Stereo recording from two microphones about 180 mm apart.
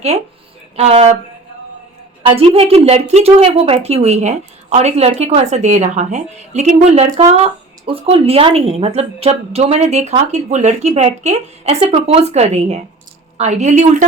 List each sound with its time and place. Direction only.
0.8 s a woman's voice: 35° right (ahead or behind)
2.2 s a woman's voice: 35° right (ahead or behind)